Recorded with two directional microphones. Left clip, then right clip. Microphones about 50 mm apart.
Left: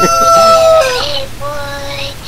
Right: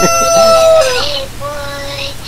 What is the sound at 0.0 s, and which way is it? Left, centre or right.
Chicken, right.